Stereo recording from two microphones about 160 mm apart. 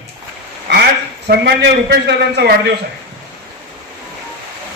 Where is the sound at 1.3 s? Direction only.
90° right.